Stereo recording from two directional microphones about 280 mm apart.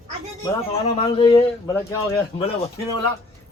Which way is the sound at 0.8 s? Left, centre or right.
Left.